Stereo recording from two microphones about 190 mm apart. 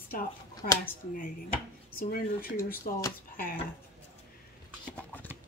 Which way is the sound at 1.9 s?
50° left (ahead or behind).